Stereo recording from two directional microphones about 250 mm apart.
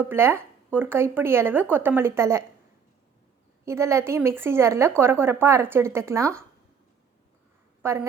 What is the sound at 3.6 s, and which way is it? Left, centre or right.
Speech, centre.